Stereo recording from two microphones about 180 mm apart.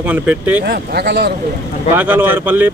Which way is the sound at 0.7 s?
65° right (ahead or behind).